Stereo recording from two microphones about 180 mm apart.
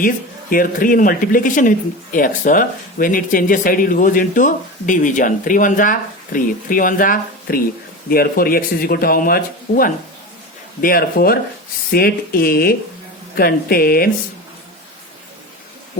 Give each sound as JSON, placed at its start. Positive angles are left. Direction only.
{"t": 0.5, "sound": "speech", "side_deg": 50}